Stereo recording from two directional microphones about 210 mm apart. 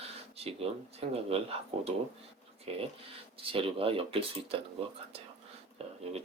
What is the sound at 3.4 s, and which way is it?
Speech, 25° right (ahead or behind).